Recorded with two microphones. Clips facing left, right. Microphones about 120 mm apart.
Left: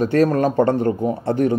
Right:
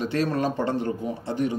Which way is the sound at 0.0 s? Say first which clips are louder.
Left 8 dB; 45° left (ahead or behind).